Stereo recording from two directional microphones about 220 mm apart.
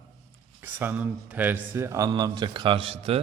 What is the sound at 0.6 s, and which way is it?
Speech, 10° right (ahead or behind).